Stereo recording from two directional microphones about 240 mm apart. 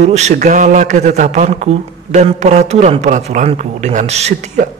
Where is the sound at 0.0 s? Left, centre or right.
Right.